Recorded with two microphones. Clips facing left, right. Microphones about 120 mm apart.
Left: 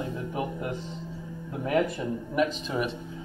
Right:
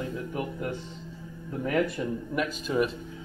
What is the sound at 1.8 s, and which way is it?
Speech, 25° left (ahead or behind).